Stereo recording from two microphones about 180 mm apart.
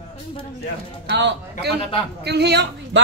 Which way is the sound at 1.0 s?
70° right (ahead or behind).